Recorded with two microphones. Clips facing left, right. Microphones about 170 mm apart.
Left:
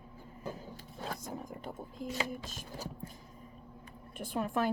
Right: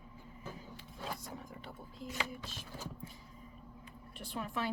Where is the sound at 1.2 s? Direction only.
45° left (ahead or behind).